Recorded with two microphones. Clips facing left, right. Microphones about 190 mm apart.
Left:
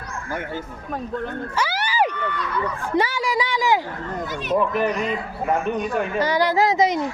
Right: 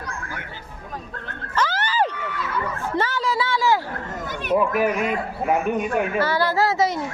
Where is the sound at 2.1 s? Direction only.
5° right (ahead or behind).